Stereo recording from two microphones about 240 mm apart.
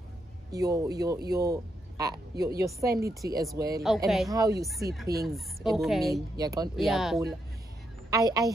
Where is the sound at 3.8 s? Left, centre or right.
Centre.